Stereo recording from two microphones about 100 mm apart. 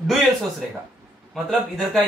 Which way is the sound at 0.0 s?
Centre (ahead or behind).